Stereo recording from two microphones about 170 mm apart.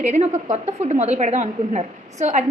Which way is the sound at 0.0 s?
45° right (ahead or behind).